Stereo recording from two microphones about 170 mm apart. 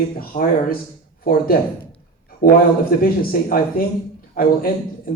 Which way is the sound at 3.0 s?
60° left (ahead or behind).